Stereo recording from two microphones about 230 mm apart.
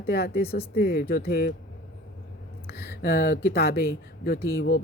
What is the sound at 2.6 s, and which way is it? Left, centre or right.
Speech, left.